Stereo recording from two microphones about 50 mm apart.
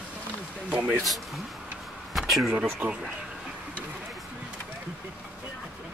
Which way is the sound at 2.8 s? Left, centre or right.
Right.